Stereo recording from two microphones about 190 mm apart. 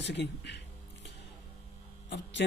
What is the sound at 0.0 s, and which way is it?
Speech, 65° left (ahead or behind).